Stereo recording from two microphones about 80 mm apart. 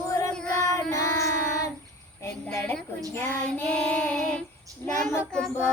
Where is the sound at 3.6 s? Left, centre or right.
Centre.